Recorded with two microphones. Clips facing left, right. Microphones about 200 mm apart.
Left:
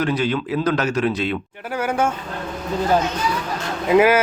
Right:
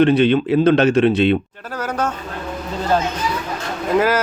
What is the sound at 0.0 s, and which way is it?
Speech, 25° right (ahead or behind).